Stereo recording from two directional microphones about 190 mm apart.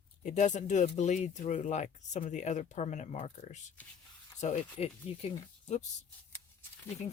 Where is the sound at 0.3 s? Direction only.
40° left (ahead or behind).